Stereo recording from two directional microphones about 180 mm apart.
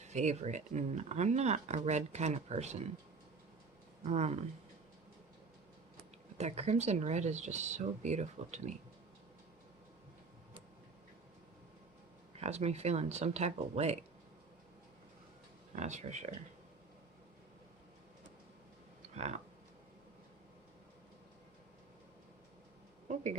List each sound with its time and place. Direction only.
0.0 s speech: 40° right (ahead or behind)
4.0 s speech: 40° right (ahead or behind)
6.3 s speech: 35° right (ahead or behind)
12.4 s speech: 35° right (ahead or behind)
15.7 s speech: 40° right (ahead or behind)
19.1 s speech: 40° right (ahead or behind)
23.0 s speech: 40° right (ahead or behind)